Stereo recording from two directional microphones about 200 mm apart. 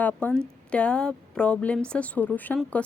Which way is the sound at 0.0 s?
5° left (ahead or behind).